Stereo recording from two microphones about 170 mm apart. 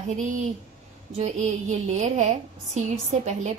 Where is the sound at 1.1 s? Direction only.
40° right (ahead or behind).